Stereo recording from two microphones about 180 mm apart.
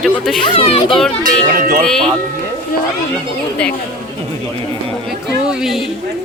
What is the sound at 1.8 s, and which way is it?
Speech, 5° left (ahead or behind).